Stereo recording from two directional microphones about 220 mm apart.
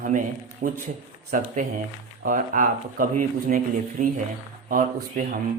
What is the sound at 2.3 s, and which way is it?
Speech, 35° right (ahead or behind).